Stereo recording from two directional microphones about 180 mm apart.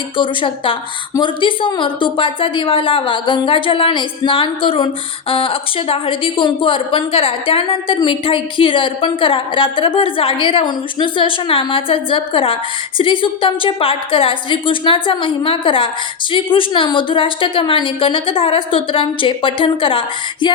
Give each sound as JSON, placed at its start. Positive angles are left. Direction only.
{"t": 0.2, "sound": "a woman's voice", "side_deg": 30}